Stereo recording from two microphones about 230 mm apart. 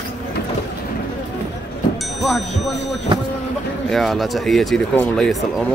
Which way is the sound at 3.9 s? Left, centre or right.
Centre.